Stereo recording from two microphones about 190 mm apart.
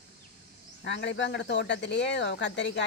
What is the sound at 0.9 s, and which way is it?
Speech, 70° left (ahead or behind).